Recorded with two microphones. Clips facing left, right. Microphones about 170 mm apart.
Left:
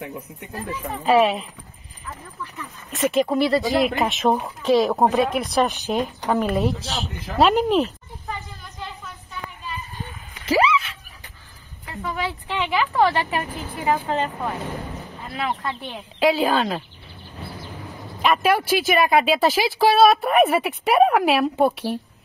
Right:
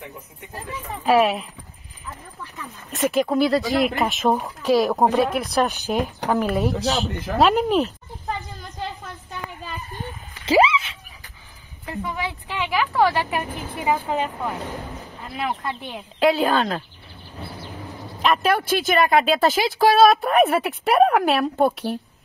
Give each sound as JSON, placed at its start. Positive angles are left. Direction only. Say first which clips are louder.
{"t": 1.0, "sound": "speech", "louder": "even", "side_deg": 0}
{"t": 2.9, "sound": "speech", "louder": "even", "side_deg": 0}
{"t": 10.4, "sound": "a sound", "louder": "right 2 dB", "side_deg": -25}
{"t": 12.0, "sound": "speech", "louder": "left 2 dB", "side_deg": -15}
{"t": 18.2, "sound": "speech", "louder": "left 1 dB", "side_deg": 5}